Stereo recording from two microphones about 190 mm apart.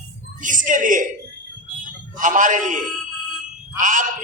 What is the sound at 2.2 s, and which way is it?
Speech, 40° right (ahead or behind).